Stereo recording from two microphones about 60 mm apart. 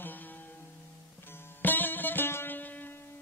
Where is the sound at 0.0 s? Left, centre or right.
Left.